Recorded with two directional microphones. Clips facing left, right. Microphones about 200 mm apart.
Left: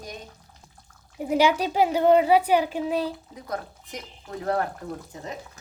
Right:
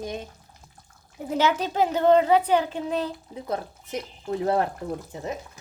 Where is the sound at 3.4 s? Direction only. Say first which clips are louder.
Right 3 dB; 25° right (ahead or behind).